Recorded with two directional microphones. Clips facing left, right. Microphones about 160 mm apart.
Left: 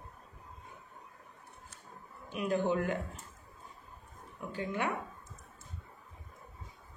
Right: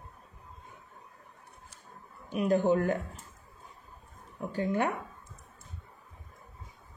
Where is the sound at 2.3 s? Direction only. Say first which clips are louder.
Right 5 dB; 40° right (ahead or behind).